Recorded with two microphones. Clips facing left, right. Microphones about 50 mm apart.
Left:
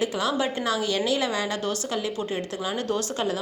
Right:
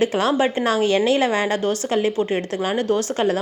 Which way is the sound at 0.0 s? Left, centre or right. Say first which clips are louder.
Right 7 dB; right.